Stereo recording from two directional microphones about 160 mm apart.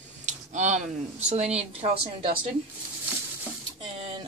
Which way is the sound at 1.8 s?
40° right (ahead or behind).